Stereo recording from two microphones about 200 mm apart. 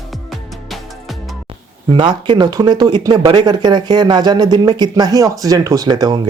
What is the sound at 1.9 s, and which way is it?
Speech, 25° right (ahead or behind).